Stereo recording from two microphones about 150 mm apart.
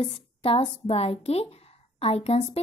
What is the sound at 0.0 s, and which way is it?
A woman's voice, 40° left (ahead or behind).